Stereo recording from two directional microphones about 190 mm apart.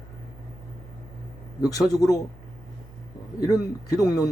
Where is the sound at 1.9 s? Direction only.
20° left (ahead or behind).